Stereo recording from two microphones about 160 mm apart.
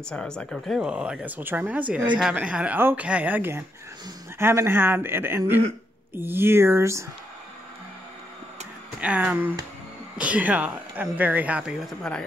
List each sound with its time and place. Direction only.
0.1 s speech: 5° left (ahead or behind); by 7.1 s 15° right (ahead or behind)
9.0 s speech: 10° right (ahead or behind)